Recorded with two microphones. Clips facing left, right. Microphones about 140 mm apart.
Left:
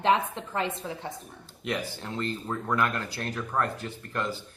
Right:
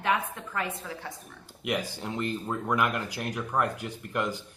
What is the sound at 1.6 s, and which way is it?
Speech, 15° right (ahead or behind).